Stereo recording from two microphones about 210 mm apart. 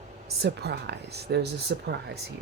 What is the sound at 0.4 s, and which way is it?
Speech, 50° right (ahead or behind).